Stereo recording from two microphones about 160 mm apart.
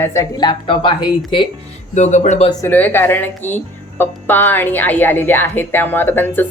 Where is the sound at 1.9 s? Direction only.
45° left (ahead or behind).